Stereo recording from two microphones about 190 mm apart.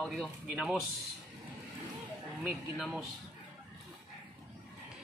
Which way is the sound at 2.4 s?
Centre (ahead or behind).